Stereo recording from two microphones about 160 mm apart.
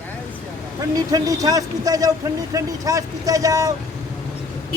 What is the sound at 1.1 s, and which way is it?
Speech, 20° right (ahead or behind).